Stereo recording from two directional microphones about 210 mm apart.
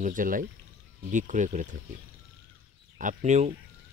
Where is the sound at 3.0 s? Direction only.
35° right (ahead or behind).